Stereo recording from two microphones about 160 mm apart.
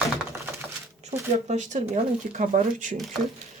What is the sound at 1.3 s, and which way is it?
Speech, 45° right (ahead or behind).